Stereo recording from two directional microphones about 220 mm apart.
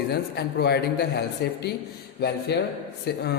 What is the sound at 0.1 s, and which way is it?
A man's voice, 45° left (ahead or behind).